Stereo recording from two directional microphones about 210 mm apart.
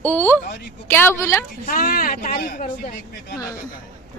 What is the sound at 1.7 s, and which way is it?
Speech, 45° left (ahead or behind).